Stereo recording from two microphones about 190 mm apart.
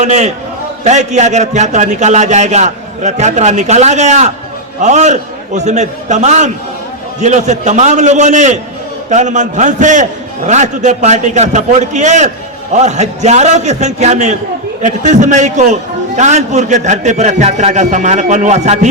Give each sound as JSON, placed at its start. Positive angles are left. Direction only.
{"t": 0.0, "sound": "a man's voice", "side_deg": -35}